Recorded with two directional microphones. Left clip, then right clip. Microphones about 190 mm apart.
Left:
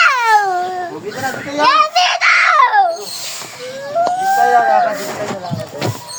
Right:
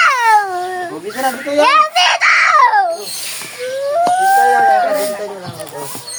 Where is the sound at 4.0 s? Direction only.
20° right (ahead or behind).